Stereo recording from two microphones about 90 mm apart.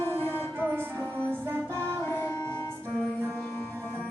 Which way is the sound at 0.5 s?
20° right (ahead or behind).